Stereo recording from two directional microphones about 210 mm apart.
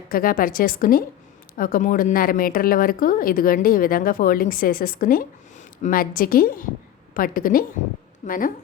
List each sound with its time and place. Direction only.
0.1 s a woman's voice: 45° left (ahead or behind)